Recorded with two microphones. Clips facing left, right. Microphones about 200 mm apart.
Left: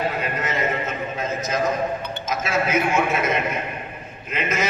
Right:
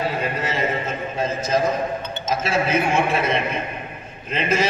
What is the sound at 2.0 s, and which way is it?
A man's voice, 25° right (ahead or behind).